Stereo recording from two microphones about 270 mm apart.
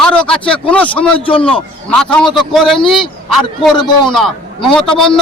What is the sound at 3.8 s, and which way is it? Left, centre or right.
Speech, centre.